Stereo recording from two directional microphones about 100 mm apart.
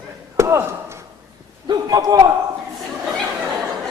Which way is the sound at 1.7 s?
40° right (ahead or behind).